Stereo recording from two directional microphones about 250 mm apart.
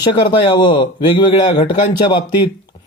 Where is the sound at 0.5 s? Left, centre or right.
Centre.